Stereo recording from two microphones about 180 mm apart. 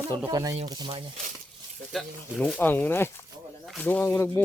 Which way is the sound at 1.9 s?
5° left (ahead or behind).